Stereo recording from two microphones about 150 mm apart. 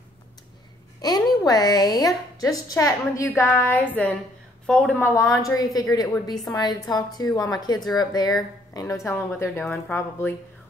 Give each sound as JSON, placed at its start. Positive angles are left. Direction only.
{"t": 1.0, "sound": "a woman's voice", "side_deg": 25}